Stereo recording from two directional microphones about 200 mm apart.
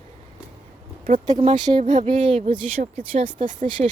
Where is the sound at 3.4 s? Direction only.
40° right (ahead or behind).